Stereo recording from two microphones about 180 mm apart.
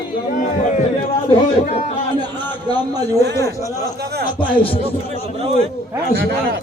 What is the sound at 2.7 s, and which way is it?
Speech, 30° left (ahead or behind).